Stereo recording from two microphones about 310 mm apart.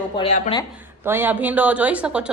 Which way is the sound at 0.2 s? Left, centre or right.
Centre.